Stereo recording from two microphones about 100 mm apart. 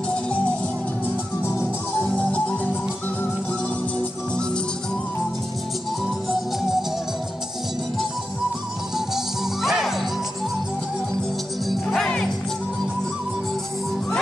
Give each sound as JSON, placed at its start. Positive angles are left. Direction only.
{"t": 0.1, "sound": "music", "side_deg": 10}
{"t": 1.0, "sound": "music", "side_deg": 25}
{"t": 8.9, "sound": "music", "side_deg": -5}
{"t": 11.6, "sound": "music", "side_deg": 0}